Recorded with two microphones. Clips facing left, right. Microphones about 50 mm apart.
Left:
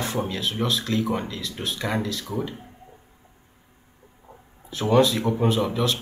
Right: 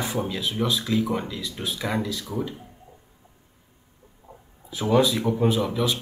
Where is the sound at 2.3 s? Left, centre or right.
Centre.